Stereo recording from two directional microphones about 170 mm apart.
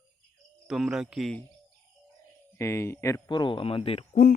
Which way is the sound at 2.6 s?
15° left (ahead or behind).